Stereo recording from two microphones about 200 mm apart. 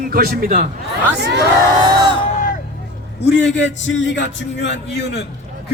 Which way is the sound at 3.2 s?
60° left (ahead or behind).